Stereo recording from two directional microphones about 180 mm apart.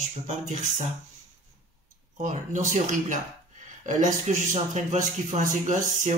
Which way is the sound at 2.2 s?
45° right (ahead or behind).